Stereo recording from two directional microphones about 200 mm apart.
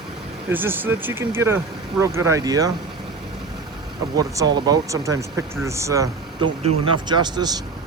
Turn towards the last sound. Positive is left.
turn(degrees=-20)  # may be behind; listen again after turning